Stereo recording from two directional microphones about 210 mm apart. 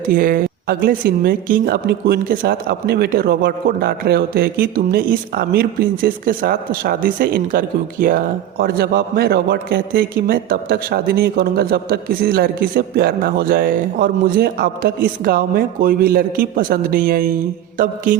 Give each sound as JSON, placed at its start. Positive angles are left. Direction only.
{"t": 0.0, "sound": "speech", "side_deg": -40}
{"t": 17.7, "sound": "mantra", "side_deg": -40}